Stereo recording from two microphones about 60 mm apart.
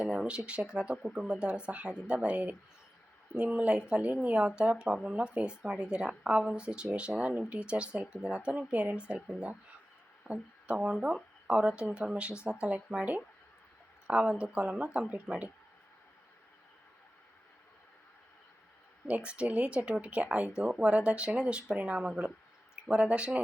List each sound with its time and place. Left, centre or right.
0.0 s speech: centre
14.1 s speech: centre
19.0 s speech: right